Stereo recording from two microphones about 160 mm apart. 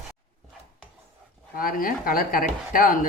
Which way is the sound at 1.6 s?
60° left (ahead or behind).